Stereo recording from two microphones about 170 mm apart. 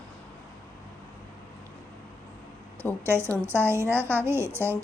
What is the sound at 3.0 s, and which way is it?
A woman's voice, 15° right (ahead or behind).